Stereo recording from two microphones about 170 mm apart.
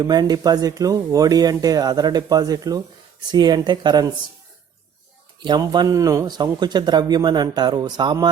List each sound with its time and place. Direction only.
0.0 s speech: 25° right (ahead or behind)
5.4 s speech: 25° right (ahead or behind)